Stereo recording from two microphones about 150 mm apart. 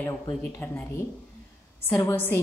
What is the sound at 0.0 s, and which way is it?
A woman's voice, 10° left (ahead or behind).